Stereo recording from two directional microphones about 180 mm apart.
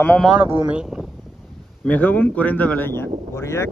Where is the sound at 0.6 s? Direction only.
5° right (ahead or behind).